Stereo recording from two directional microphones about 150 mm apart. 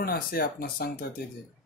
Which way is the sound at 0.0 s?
90° left.